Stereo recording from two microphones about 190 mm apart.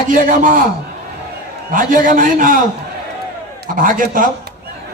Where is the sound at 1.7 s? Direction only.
45° right (ahead or behind).